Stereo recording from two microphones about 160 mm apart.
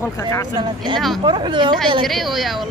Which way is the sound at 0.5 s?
30° right (ahead or behind).